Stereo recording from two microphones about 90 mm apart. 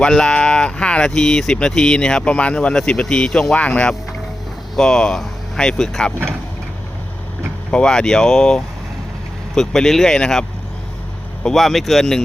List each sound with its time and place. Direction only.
0.0 s speech: 10° left (ahead or behind)
7.7 s speech: 10° left (ahead or behind)
11.4 s speech: centre (ahead or behind)